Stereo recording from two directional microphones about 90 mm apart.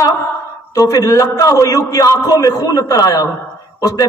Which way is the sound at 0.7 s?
40° left (ahead or behind).